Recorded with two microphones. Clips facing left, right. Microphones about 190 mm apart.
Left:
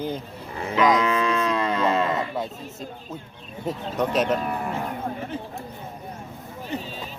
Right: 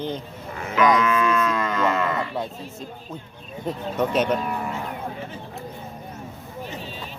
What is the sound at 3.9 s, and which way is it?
Speech, centre (ahead or behind).